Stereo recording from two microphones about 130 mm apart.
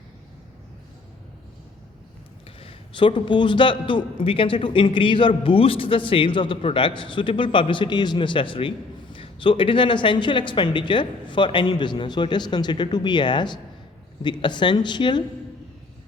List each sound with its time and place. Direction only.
2.6 s a man's voice: 45° left (ahead or behind)